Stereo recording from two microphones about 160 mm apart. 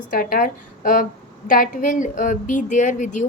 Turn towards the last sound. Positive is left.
turn(degrees=50)  # may be behind; listen again after turning